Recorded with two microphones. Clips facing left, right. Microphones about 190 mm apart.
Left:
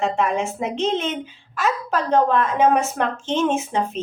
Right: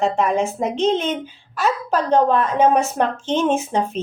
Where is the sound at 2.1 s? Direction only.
35° right (ahead or behind).